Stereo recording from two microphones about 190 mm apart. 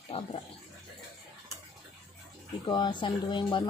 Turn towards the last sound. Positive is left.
turn(degrees=25)  # may be behind; listen again after turning